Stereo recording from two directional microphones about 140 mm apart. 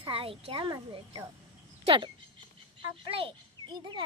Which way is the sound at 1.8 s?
35° right (ahead or behind).